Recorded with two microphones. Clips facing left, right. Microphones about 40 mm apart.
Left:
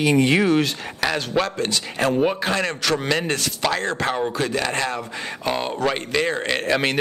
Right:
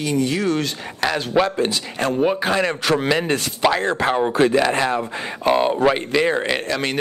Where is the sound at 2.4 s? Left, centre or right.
Centre.